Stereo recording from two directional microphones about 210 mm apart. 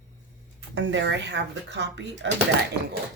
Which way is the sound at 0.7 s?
60° right (ahead or behind).